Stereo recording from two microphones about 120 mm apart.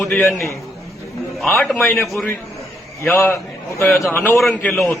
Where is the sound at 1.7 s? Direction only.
20° left (ahead or behind).